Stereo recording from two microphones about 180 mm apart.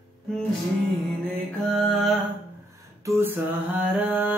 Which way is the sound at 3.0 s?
15° right (ahead or behind).